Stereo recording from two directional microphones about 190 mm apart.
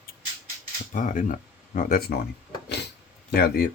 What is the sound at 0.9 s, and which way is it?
Speech, 40° left (ahead or behind).